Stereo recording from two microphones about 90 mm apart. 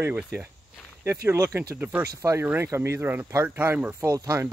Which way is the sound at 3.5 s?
20° right (ahead or behind).